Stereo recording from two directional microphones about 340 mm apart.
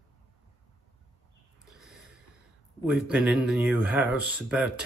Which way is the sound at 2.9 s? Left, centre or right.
Centre.